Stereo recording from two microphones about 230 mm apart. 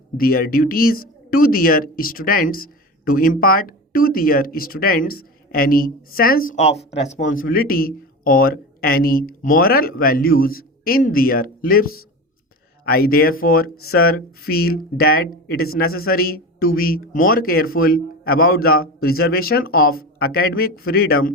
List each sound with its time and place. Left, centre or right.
0.2 s speech: left